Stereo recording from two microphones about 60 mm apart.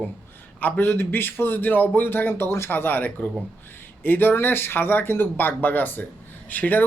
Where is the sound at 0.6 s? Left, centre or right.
Left.